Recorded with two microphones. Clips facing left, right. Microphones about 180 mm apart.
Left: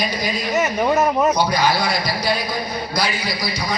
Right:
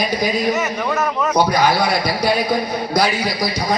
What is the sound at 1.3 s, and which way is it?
A man's voice, 55° right (ahead or behind).